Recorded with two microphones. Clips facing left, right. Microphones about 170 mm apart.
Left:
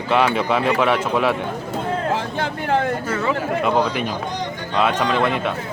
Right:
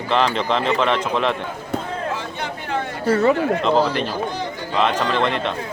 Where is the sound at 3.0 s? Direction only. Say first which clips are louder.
Right 6 dB; 40° right (ahead or behind).